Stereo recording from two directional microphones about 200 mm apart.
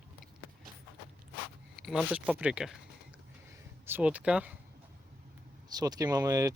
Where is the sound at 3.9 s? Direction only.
10° right (ahead or behind).